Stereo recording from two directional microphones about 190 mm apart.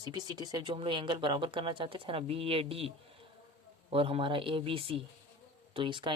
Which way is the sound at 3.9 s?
30° right (ahead or behind).